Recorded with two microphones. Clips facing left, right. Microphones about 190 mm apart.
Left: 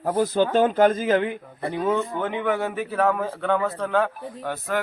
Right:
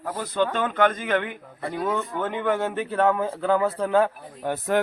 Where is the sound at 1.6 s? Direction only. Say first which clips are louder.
Left 3 dB; 15° left (ahead or behind); by 4.6 s 15° right (ahead or behind).